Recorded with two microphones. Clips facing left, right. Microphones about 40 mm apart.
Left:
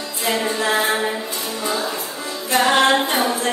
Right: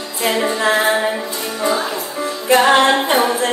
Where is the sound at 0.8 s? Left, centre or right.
Centre.